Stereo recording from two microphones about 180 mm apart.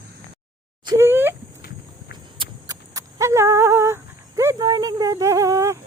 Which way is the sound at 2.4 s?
20° right (ahead or behind).